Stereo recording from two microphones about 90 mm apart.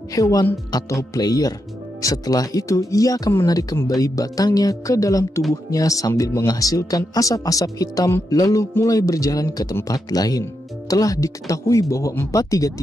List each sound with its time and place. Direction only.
0.1 s speech: 40° left (ahead or behind)